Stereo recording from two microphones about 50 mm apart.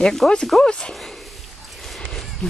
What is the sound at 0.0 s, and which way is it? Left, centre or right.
Speech, centre.